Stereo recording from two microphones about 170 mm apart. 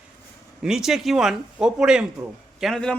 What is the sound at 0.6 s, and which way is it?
A man's voice, centre (ahead or behind).